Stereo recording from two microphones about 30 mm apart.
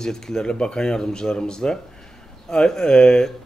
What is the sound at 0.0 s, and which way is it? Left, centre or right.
Speech, centre.